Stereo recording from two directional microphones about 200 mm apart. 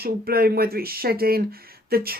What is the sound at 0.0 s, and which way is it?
Speech, 50° right (ahead or behind).